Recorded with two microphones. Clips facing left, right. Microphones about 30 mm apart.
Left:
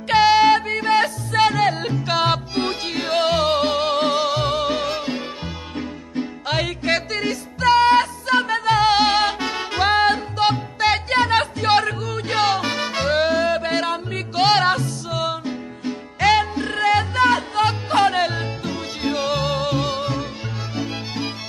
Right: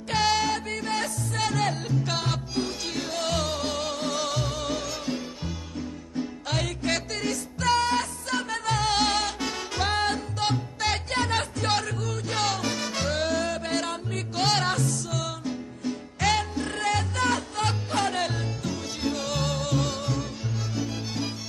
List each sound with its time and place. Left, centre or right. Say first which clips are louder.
0.1 s music: left 10 dB; left
2.2 s music: left 9 dB; left